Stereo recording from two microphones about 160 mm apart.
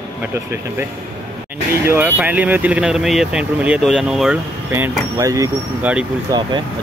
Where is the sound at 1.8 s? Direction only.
10° right (ahead or behind).